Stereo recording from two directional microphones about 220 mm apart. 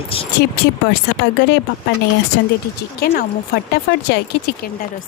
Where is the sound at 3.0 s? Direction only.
45° left (ahead or behind).